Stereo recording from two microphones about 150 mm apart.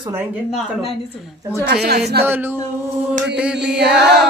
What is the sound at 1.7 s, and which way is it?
Speech, 90° right.